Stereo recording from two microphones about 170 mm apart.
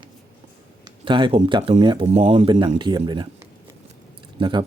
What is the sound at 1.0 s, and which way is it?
Speech, 30° right (ahead or behind).